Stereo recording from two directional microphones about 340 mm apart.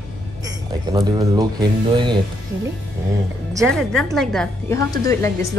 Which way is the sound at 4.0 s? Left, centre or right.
Centre.